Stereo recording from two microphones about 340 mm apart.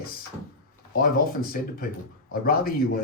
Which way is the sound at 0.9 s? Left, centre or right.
Left.